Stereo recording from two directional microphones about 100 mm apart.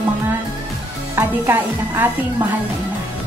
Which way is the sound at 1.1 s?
25° right (ahead or behind).